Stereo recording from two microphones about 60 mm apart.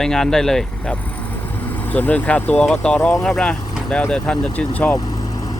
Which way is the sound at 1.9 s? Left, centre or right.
Left.